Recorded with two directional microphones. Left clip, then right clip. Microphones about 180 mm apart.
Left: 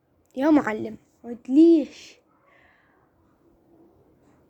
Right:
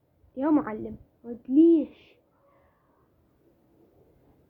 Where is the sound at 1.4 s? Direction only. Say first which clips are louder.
Left 3 dB; 35° left (ahead or behind).